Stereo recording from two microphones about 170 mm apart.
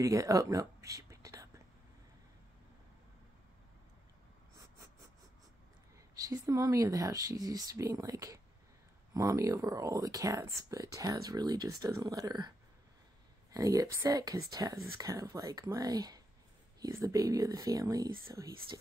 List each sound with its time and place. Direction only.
0.0 s speech: 20° right (ahead or behind)
6.1 s speech: 20° right (ahead or behind)